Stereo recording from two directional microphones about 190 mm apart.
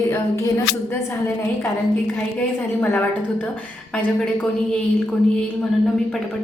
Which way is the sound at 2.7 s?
10° left (ahead or behind).